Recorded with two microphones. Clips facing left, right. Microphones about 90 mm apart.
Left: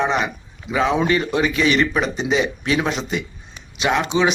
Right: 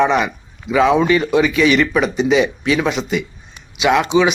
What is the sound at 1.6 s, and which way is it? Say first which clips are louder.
Speech: right 3 dB; 30° left (ahead or behind).